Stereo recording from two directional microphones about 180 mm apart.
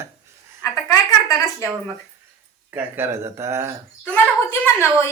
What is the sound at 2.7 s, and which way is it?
Speech, 15° right (ahead or behind).